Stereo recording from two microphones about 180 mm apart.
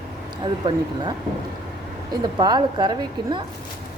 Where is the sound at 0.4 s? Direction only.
25° right (ahead or behind).